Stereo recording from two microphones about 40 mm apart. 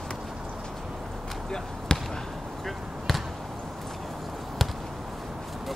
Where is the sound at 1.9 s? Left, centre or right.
Left.